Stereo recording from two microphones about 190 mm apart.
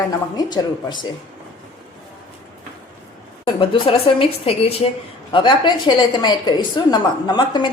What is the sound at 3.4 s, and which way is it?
A woman's voice, 25° left (ahead or behind).